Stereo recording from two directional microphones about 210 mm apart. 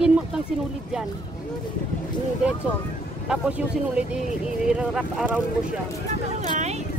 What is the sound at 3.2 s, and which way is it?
Speech, 5° right (ahead or behind).